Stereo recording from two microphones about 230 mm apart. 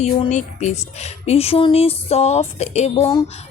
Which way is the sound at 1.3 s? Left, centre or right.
Left.